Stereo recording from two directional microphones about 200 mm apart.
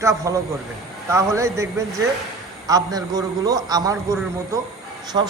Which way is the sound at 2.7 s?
20° right (ahead or behind).